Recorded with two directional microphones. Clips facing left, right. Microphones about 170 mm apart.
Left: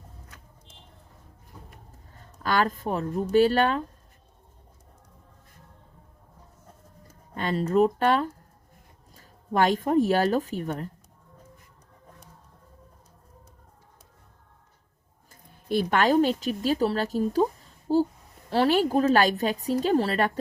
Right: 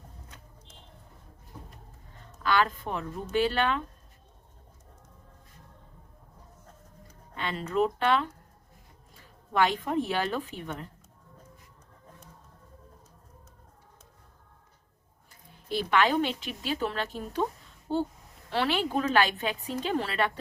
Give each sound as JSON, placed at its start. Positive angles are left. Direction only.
{"t": 0.3, "sound": "vehicle", "side_deg": -30}
{"t": 2.1, "sound": "speech", "side_deg": 40}
{"t": 7.3, "sound": "speech", "side_deg": 40}
{"t": 15.3, "sound": "speech", "side_deg": 45}